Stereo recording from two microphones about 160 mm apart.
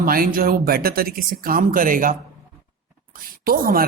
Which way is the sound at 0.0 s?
65° right (ahead or behind).